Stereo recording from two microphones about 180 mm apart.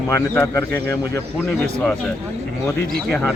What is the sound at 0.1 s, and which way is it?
A man's voice, 15° left (ahead or behind).